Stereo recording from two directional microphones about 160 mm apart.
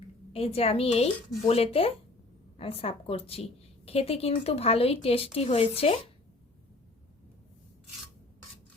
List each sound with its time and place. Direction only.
0.3 s speech: 40° left (ahead or behind)